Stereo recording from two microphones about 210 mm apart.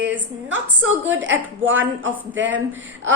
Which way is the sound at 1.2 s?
65° right (ahead or behind).